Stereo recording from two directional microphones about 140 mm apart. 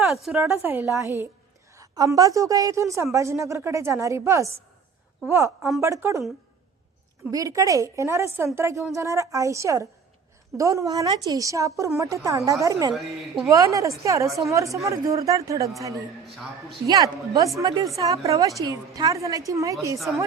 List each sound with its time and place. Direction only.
0.1 s a woman's voice: centre (ahead or behind)
0.4 s a woman's voice: 15° right (ahead or behind)
5.8 s a woman's voice: 20° right (ahead or behind)
7.3 s a woman's voice: 25° right (ahead or behind)
12.9 s a woman's voice: centre (ahead or behind)
13.5 s a woman's voice: 25° right (ahead or behind)
16.8 s a woman's voice: 25° right (ahead or behind)